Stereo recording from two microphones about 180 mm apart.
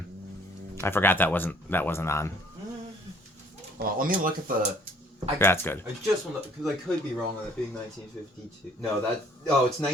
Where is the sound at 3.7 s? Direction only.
50° right (ahead or behind).